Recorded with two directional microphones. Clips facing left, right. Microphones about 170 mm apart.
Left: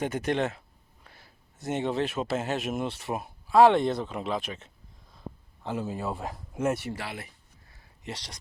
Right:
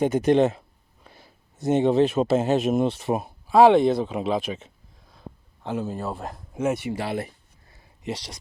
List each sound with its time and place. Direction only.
0.0 s speech: 20° right (ahead or behind)
3.6 s speech: 10° right (ahead or behind)
5.6 s speech: centre (ahead or behind)
6.9 s speech: 25° right (ahead or behind)
8.0 s speech: 10° right (ahead or behind)